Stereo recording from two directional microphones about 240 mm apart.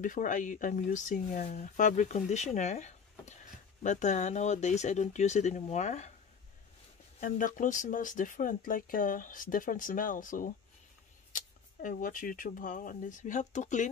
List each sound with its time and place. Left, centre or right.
0.0 s speech: left
7.2 s speech: left